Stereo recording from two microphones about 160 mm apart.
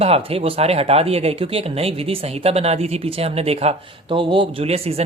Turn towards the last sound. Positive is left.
turn(degrees=-40)  # may be behind; listen again after turning